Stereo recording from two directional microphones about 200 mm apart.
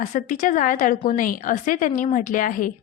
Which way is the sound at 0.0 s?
35° left (ahead or behind).